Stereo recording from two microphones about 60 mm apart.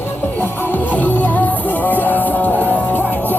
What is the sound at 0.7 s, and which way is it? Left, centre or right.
Music, left.